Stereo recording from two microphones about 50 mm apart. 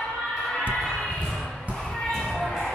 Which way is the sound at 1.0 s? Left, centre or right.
Centre.